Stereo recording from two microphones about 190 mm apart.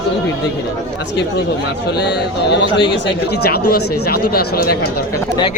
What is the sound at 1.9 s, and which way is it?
Speech, 60° left (ahead or behind).